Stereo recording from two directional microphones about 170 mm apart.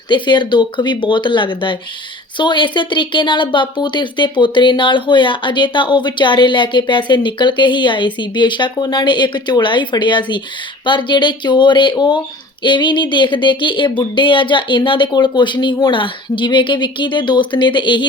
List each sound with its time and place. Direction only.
0.1 s speech: 25° left (ahead or behind)